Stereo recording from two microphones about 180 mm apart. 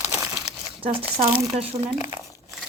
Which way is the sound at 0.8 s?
30° right (ahead or behind).